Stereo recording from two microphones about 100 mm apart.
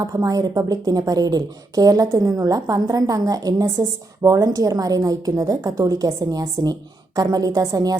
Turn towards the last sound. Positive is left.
turn(degrees=-40)  # may be behind; listen again after turning